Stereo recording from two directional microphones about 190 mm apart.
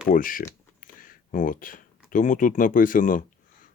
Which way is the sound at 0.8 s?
45° left (ahead or behind).